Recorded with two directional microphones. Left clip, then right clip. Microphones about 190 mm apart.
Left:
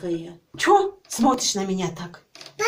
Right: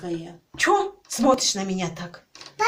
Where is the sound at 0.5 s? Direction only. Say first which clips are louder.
Left 3 dB; 10° right (ahead or behind).